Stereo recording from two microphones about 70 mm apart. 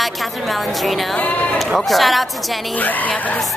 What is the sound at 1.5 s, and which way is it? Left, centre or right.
Speech, centre.